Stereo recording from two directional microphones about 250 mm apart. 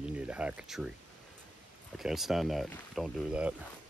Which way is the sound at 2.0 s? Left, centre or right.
Centre.